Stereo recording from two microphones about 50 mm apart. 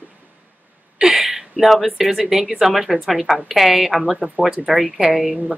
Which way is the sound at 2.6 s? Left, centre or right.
Centre.